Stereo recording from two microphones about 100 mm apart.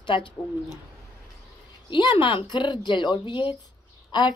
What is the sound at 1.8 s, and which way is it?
Speech, 55° left (ahead or behind).